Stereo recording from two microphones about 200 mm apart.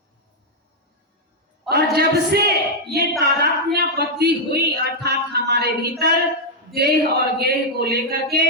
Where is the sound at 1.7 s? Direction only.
55° right (ahead or behind).